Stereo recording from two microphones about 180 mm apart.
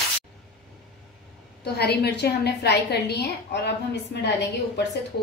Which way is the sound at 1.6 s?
65° left (ahead or behind).